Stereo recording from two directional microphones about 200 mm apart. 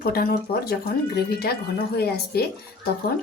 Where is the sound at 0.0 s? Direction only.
50° left (ahead or behind).